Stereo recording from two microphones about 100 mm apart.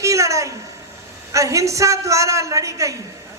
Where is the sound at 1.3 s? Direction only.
30° right (ahead or behind).